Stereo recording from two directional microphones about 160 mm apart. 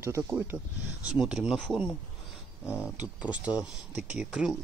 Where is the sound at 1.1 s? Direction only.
5° right (ahead or behind).